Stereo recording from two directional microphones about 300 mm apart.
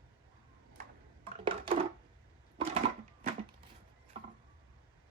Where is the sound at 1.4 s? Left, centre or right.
Centre.